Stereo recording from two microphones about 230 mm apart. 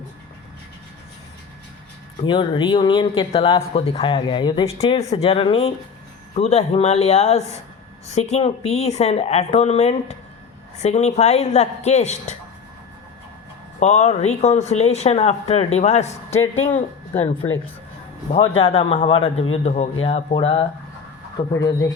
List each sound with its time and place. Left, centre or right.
2.2 s speech: left
13.7 s speech: left
18.3 s speech: left